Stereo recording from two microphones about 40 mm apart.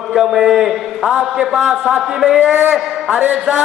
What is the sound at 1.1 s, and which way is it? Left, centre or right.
A man's voice, right.